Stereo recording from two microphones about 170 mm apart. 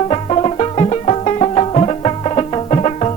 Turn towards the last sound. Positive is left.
turn(degrees=40)  # may be behind; listen again after turning